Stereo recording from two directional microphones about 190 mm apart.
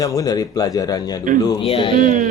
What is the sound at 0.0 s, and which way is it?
Speech, 20° left (ahead or behind).